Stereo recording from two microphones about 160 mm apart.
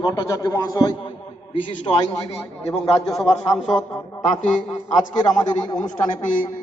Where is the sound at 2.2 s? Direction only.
20° left (ahead or behind).